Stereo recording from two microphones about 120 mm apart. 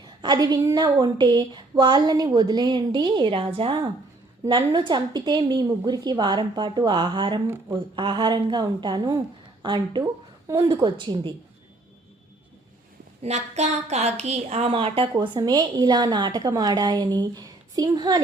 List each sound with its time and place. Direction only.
0.2 s a woman's voice: 35° right (ahead or behind)
7.4 s speech: 20° right (ahead or behind)
7.9 s a woman's voice: 40° right (ahead or behind)
10.5 s speech: 30° right (ahead or behind)
10.8 s a woman's voice: 40° right (ahead or behind)
13.2 s a woman's voice: 65° right (ahead or behind); by 15.1 s 50° right (ahead or behind)
15.1 s a woman's voice: 35° right (ahead or behind)